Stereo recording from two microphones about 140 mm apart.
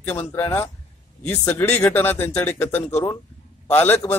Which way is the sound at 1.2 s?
15° left (ahead or behind).